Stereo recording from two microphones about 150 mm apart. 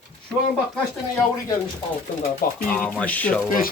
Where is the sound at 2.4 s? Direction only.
80° left.